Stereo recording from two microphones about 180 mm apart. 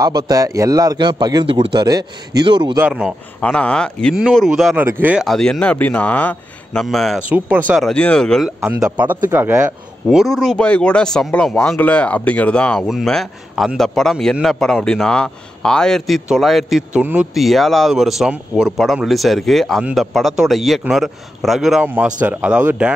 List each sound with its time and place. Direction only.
0.0 s speech: 20° right (ahead or behind)
2.9 s speech: centre (ahead or behind)
7.9 s speech: 5° left (ahead or behind); by 9.8 s 10° right (ahead or behind)
10.0 s speech: centre (ahead or behind)